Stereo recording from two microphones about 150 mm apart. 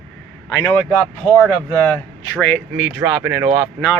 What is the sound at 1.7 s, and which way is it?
Speech, 10° left (ahead or behind).